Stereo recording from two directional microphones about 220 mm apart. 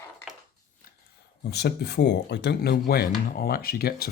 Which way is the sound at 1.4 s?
50° left (ahead or behind).